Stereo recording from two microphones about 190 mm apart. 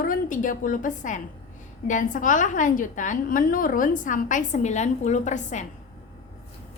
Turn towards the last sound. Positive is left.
turn(degrees=40)  # may be behind; listen again after turning